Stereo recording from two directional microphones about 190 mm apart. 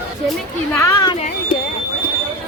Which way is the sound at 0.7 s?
15° left (ahead or behind).